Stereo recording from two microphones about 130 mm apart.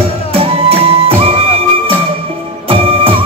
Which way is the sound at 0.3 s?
45° right (ahead or behind).